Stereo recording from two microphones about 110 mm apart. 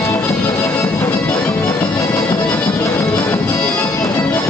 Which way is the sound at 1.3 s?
15° left (ahead or behind).